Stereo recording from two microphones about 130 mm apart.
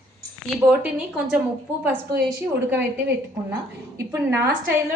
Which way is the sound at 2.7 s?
15° right (ahead or behind).